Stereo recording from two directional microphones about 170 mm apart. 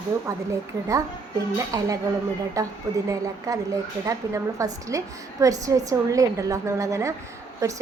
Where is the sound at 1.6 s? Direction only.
20° right (ahead or behind).